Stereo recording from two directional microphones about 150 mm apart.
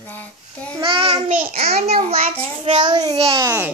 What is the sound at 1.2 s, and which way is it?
Speech, 65° right (ahead or behind).